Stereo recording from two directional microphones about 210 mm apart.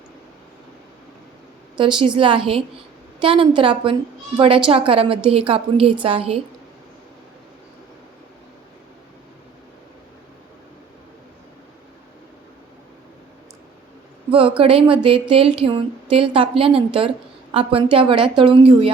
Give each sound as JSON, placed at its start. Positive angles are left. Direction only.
{"t": 1.8, "sound": "a woman's voice", "side_deg": -20}
{"t": 14.3, "sound": "a woman's voice", "side_deg": -25}